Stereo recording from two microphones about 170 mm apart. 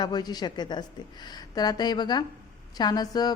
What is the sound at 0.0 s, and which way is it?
A woman's voice, 25° left (ahead or behind).